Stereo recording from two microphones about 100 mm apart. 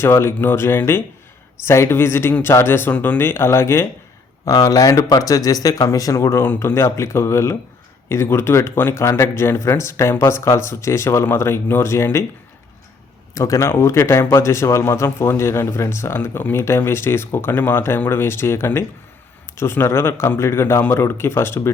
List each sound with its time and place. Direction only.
0.0 s a man's voice: 25° left (ahead or behind)
4.4 s a man's voice: 35° left (ahead or behind)
13.3 s a man's voice: 30° left (ahead or behind)